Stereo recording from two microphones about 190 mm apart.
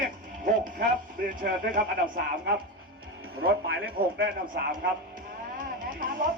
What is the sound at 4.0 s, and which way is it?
Speech, 50° right (ahead or behind).